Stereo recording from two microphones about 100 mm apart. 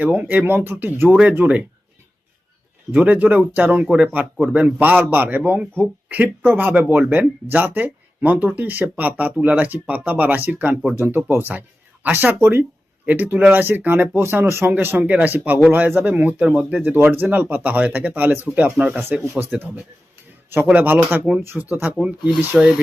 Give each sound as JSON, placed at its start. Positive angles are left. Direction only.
{"t": 0.0, "sound": "a man's voice", "side_deg": -15}
{"t": 2.9, "sound": "a man's voice", "side_deg": -15}
{"t": 20.7, "sound": "a man's voice", "side_deg": -15}
{"t": 22.3, "sound": "speech", "side_deg": -5}